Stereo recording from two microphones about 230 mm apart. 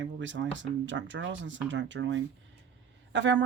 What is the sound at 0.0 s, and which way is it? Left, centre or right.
Speech, right.